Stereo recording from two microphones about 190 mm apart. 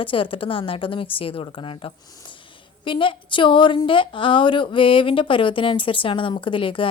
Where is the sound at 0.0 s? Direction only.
25° left (ahead or behind).